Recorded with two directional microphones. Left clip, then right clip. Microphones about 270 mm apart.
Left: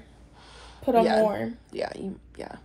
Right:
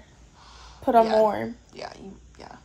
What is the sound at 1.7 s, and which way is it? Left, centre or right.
Speech, left.